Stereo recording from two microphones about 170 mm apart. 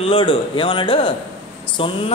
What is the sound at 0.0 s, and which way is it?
Speech, 30° left (ahead or behind).